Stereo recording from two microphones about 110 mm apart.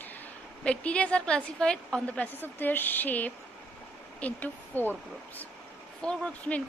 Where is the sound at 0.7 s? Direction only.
10° left (ahead or behind).